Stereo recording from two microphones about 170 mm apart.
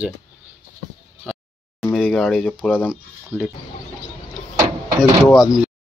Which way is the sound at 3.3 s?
10° right (ahead or behind).